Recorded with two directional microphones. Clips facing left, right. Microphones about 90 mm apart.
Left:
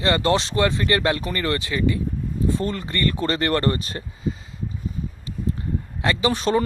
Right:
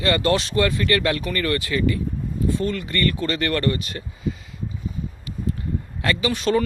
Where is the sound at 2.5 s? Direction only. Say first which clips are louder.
Right 1 dB; 35° left (ahead or behind).